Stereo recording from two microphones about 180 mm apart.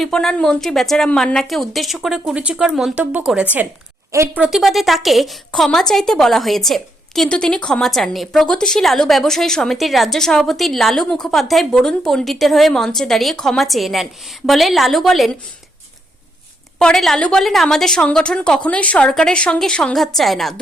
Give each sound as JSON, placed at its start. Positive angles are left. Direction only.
{"t": 0.0, "sound": "a woman's voice", "side_deg": 0}
{"t": 4.4, "sound": "a woman's voice", "side_deg": 0}
{"t": 16.7, "sound": "a woman's voice", "side_deg": 5}